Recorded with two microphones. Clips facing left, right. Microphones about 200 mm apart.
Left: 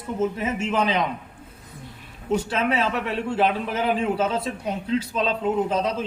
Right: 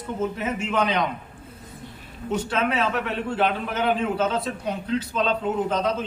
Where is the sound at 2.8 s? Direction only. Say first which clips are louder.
Even; 5° left (ahead or behind).